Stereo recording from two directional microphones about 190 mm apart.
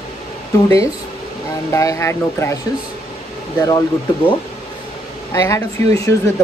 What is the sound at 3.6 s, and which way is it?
Speech, 15° left (ahead or behind).